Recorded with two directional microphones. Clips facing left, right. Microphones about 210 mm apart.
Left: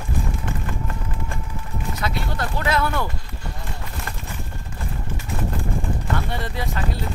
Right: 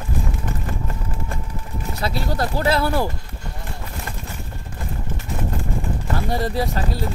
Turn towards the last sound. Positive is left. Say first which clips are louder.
# right 6 dB
turn(degrees=-35)  # may be behind; listen again after turning